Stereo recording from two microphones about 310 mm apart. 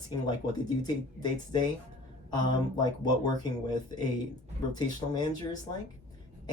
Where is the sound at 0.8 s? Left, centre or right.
Centre.